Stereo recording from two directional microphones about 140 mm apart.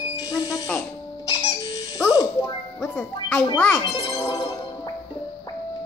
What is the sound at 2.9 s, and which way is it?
Music, 10° left (ahead or behind).